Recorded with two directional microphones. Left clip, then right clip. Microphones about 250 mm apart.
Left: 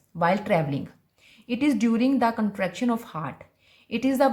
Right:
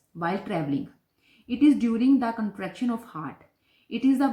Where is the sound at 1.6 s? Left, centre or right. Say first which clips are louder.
Right 2 dB; left.